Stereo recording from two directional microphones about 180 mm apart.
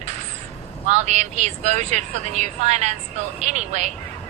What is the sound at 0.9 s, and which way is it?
Speech, 40° right (ahead or behind).